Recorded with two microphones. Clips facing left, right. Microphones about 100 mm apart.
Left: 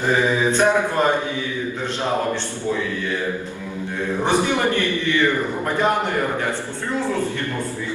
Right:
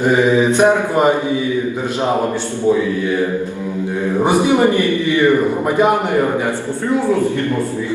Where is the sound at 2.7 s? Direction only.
15° right (ahead or behind).